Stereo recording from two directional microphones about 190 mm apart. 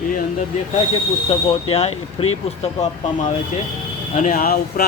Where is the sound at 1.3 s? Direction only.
30° left (ahead or behind).